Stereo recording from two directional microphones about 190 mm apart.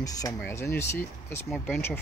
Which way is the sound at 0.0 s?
20° left (ahead or behind).